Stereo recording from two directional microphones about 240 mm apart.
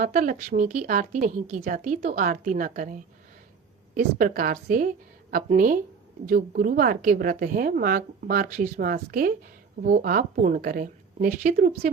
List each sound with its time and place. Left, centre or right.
0.0 s a woman's voice: right